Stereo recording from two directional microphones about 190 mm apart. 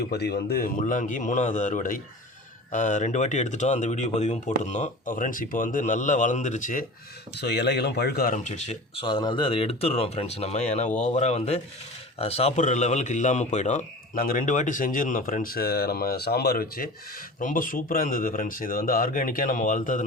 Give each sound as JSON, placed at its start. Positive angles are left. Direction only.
{"t": 0.1, "sound": "speech", "side_deg": 60}
{"t": 0.8, "sound": "speech", "side_deg": 40}
{"t": 7.3, "sound": "a man's voice", "side_deg": 60}